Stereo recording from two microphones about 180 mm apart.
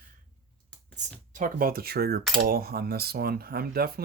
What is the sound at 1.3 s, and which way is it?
Speech, 50° right (ahead or behind).